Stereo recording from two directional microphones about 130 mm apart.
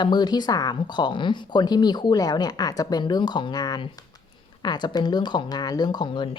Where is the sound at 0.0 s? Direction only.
35° left (ahead or behind).